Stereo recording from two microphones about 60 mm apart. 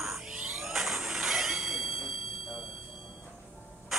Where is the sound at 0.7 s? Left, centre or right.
Centre.